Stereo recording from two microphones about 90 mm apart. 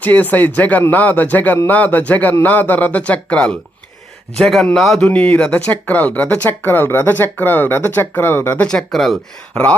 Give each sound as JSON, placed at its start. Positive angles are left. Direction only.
{"t": 0.0, "sound": "a man's voice", "side_deg": 20}
{"t": 8.6, "sound": "a man's voice", "side_deg": 5}